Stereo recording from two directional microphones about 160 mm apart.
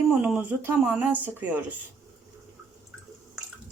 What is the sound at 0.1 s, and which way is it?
A woman's voice, 5° right (ahead or behind).